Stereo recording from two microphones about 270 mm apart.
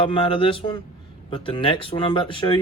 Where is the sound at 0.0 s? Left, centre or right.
Centre.